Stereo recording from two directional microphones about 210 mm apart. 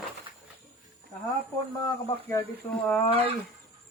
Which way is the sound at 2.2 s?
10° left (ahead or behind).